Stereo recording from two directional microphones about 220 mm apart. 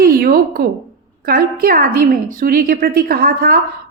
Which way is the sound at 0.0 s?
45° right (ahead or behind).